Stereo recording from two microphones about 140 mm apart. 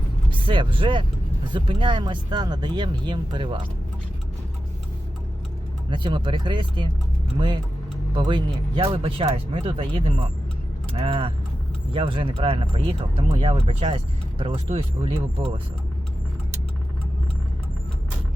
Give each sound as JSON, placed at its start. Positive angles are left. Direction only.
{"t": 0.3, "sound": "speech", "side_deg": -35}
{"t": 5.9, "sound": "speech", "side_deg": -35}